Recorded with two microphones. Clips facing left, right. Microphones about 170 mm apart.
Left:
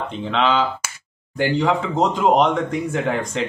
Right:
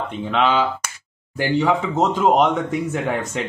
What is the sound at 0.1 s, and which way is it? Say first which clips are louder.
Speech: right 1 dB; centre (ahead or behind).